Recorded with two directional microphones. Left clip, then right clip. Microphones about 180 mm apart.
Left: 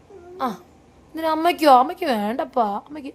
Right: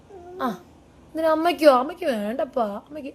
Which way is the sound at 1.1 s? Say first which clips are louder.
Even; 15° left (ahead or behind).